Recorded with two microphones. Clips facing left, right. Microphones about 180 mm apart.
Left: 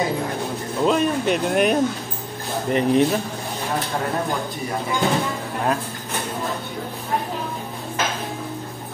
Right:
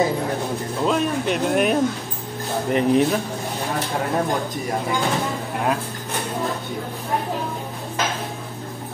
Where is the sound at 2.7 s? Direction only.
5° right (ahead or behind).